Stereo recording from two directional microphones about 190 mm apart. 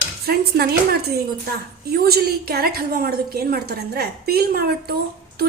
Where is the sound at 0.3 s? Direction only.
55° right (ahead or behind).